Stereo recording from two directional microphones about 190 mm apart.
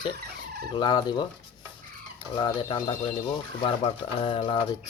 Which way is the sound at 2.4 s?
25° left (ahead or behind).